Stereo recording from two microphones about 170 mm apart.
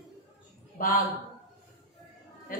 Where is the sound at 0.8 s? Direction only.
55° left (ahead or behind).